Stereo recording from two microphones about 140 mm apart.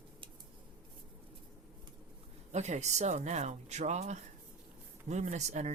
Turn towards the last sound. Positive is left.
turn(degrees=-55)  # may be behind; listen again after turning